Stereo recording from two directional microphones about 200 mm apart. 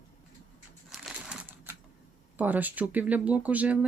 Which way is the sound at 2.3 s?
10° right (ahead or behind).